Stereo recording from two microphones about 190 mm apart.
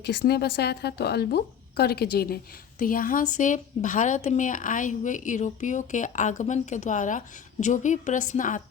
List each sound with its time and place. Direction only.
0.0 s a woman's voice: 60° left (ahead or behind); by 8.6 s 40° left (ahead or behind)